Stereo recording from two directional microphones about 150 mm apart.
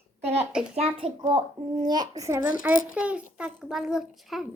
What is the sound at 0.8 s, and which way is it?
A child's voice, 40° right (ahead or behind).